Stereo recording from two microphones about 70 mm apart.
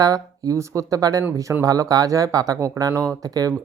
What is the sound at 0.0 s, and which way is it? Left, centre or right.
Speech, right.